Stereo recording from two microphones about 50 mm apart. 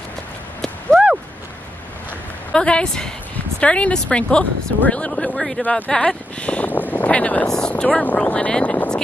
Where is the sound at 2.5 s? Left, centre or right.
Centre.